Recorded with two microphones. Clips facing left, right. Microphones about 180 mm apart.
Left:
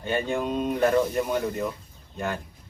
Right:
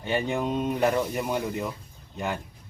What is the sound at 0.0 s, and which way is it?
Speech, 15° right (ahead or behind).